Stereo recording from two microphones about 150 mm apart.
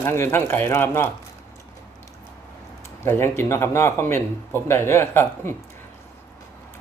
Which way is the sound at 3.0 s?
15° left (ahead or behind).